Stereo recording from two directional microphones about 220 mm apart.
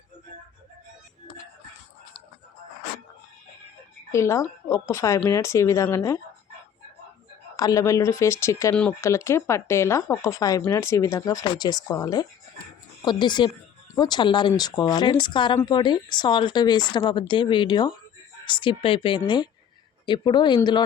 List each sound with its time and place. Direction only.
4.1 s speech: 15° left (ahead or behind)
7.5 s speech: 15° left (ahead or behind)